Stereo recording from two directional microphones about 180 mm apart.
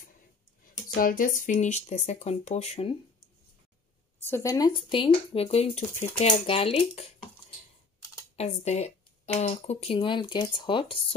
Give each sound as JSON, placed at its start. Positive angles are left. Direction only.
{"t": 0.9, "sound": "speech", "side_deg": 50}
{"t": 4.2, "sound": "speech", "side_deg": 15}
{"t": 8.4, "sound": "speech", "side_deg": 40}